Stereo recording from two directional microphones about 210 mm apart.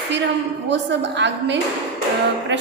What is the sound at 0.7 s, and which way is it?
A woman's voice, 55° right (ahead or behind).